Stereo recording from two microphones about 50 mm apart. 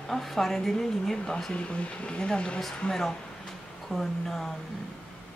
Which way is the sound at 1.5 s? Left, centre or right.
Left.